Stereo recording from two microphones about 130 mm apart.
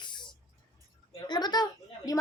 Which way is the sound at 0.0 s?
35° left (ahead or behind).